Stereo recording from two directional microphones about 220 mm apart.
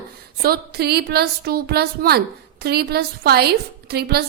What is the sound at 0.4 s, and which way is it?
A woman's voice, 45° right (ahead or behind).